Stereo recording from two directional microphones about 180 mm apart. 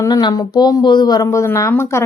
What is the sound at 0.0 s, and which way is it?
Speech, 20° left (ahead or behind).